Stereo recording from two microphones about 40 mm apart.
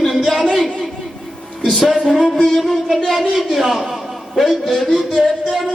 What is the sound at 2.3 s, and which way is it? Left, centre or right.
Music, left.